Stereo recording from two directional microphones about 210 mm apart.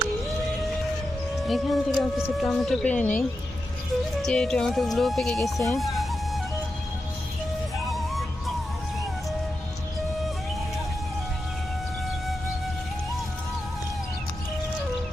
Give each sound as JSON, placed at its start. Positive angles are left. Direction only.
{"t": 1.5, "sound": "speech", "side_deg": 0}
{"t": 7.9, "sound": "music", "side_deg": 0}